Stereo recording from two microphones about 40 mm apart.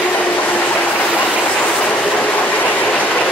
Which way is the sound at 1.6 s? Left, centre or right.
Left.